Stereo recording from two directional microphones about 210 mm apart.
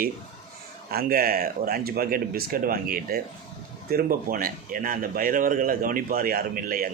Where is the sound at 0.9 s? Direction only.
45° right (ahead or behind).